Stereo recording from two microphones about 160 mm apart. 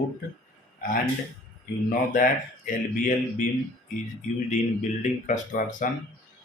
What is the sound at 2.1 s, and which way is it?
Speech, 55° left (ahead or behind).